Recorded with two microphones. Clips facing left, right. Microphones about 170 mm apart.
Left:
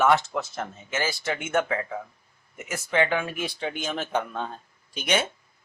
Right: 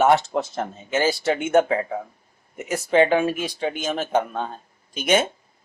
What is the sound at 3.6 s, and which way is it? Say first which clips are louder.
Speech: right 7 dB; 50° right (ahead or behind).